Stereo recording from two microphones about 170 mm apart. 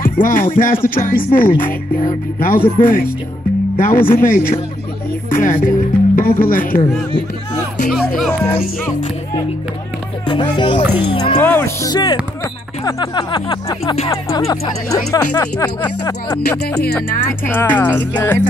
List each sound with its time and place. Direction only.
0.0 s speech: 55° left (ahead or behind)
8.2 s speech: centre (ahead or behind)
10.2 s speech: 30° left (ahead or behind)
11.4 s speech: 15° left (ahead or behind)
17.5 s speech: 10° left (ahead or behind)